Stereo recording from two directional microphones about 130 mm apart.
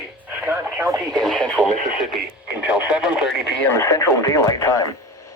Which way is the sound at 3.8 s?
20° left (ahead or behind).